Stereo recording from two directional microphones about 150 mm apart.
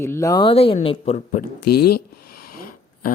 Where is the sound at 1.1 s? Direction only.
65° left (ahead or behind).